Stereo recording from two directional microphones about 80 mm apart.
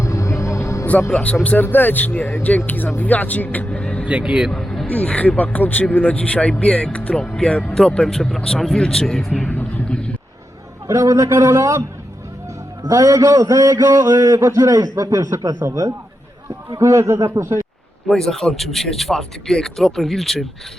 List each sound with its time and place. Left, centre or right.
0.0 s vehicle: left
1.5 s speech: left
4.0 s speech: centre
4.5 s a sound: centre
4.9 s speech: centre
9.5 s vehicle: left
10.8 s a man's voice: right
12.9 s a man's voice: right
18.1 s speech: centre